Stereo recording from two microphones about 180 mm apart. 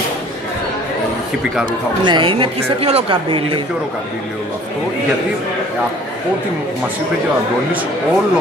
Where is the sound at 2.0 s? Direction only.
25° right (ahead or behind).